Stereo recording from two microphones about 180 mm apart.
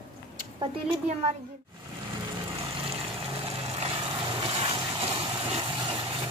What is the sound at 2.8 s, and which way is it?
Vehicle, 30° right (ahead or behind).